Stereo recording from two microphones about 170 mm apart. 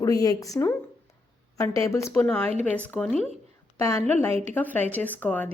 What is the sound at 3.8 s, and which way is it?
A woman's voice, 15° left (ahead or behind).